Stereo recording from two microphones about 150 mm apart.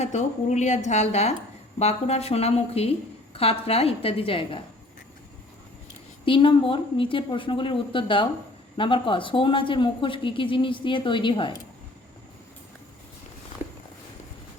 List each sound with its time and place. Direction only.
0.0 s a woman's voice: 50° left (ahead or behind)
6.2 s speech: 35° left (ahead or behind)
13.6 s walk: 15° right (ahead or behind)